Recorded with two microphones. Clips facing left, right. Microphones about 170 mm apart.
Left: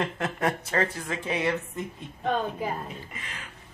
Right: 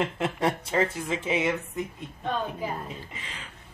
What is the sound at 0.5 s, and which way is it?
Speech, 15° right (ahead or behind).